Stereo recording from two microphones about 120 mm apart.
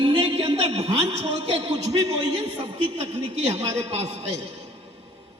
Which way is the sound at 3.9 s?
60° right (ahead or behind).